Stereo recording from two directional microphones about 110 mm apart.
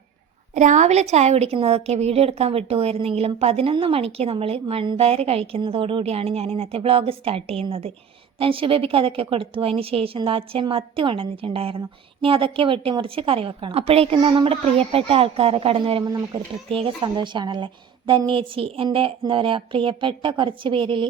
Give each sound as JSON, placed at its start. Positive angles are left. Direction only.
{"t": 0.5, "sound": "a woman's voice", "side_deg": -90}
{"t": 1.5, "sound": "a woman's voice", "side_deg": -65}
{"t": 16.0, "sound": "speech", "side_deg": -35}
{"t": 16.6, "sound": "speech", "side_deg": -55}